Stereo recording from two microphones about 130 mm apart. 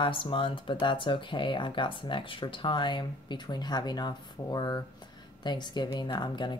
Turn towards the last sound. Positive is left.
turn(degrees=35)  # may be behind; listen again after turning